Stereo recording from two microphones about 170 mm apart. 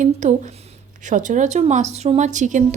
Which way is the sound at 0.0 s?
45° right (ahead or behind).